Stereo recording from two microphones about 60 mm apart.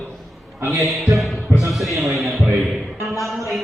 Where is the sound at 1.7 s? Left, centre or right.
Centre.